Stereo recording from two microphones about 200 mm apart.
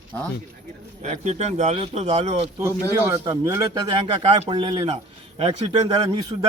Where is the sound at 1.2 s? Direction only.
35° right (ahead or behind).